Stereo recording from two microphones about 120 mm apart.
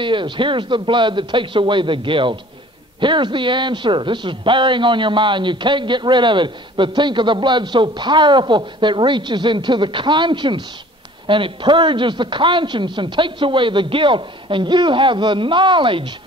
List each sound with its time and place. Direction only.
0.0 s a man's voice: 45° right (ahead or behind)